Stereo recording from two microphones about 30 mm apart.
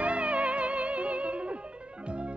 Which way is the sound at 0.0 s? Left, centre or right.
Right.